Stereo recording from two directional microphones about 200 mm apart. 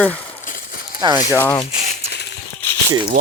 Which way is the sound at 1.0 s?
20° right (ahead or behind).